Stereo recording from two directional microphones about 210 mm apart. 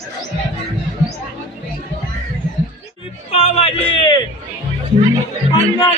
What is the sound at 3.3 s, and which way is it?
Speech, 30° left (ahead or behind).